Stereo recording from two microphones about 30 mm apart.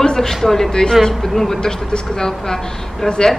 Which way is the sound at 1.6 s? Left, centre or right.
Left.